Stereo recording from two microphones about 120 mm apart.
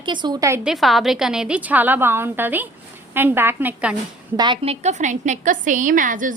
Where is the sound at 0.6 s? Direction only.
Centre (ahead or behind).